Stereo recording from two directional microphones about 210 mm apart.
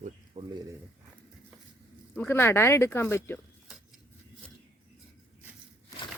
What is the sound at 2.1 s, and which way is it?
Speech, 10° left (ahead or behind).